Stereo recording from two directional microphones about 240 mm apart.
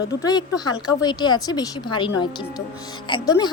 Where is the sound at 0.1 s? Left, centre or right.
Centre.